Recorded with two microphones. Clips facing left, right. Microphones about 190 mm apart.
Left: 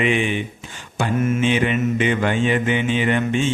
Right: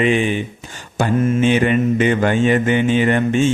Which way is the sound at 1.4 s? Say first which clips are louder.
Right 4 dB; 45° right (ahead or behind).